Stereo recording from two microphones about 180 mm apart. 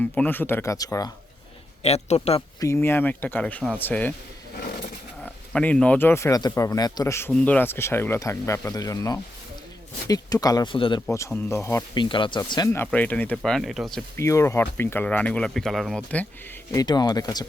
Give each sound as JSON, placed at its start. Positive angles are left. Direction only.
{"t": 0.0, "sound": "speech", "side_deg": 10}
{"t": 1.8, "sound": "a man's voice", "side_deg": 35}
{"t": 2.6, "sound": "speech", "side_deg": 15}
{"t": 5.2, "sound": "speech", "side_deg": 10}
{"t": 11.1, "sound": "speech", "side_deg": 15}
{"t": 11.9, "sound": "speech", "side_deg": 25}
{"t": 14.2, "sound": "speech", "side_deg": 15}
{"t": 16.7, "sound": "speech", "side_deg": 20}